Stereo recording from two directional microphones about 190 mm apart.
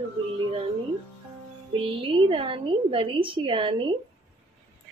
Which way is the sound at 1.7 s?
30° right (ahead or behind).